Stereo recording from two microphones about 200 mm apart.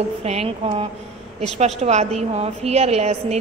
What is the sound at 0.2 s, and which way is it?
A woman's voice, 30° right (ahead or behind).